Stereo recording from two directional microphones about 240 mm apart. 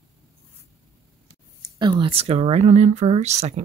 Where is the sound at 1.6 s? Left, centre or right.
Centre.